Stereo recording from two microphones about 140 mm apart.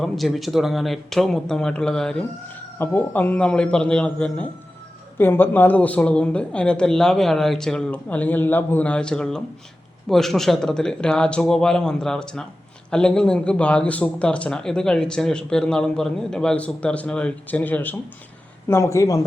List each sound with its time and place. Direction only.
0.0 s speech: centre (ahead or behind)
2.7 s a man's voice: 15° left (ahead or behind)